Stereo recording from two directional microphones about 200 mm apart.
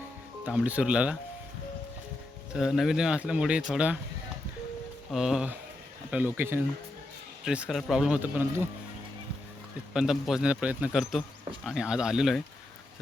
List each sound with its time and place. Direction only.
0.4 s a man's voice: 5° right (ahead or behind)
2.5 s a man's voice: centre (ahead or behind)
5.1 s a man's voice: 5° right (ahead or behind)
9.9 s a man's voice: 5° right (ahead or behind)